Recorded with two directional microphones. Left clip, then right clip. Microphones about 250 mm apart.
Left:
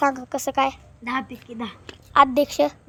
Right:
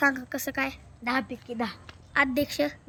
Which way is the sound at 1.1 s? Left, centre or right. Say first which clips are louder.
Left 2 dB; centre.